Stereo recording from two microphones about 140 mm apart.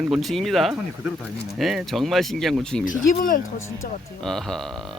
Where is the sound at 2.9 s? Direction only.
80° left.